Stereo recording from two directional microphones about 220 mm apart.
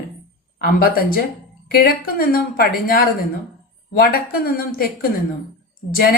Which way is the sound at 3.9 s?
40° left (ahead or behind).